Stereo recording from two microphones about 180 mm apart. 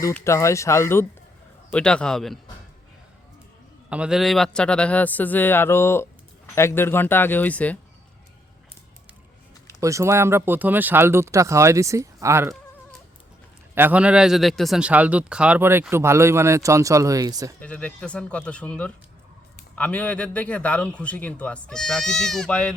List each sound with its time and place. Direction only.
0.0 s a man's voice: 15° left (ahead or behind)
3.8 s a man's voice: 5° right (ahead or behind)
9.8 s speech: 15° right (ahead or behind)
13.7 s speech: 10° right (ahead or behind)
17.6 s a man's voice: 5° left (ahead or behind)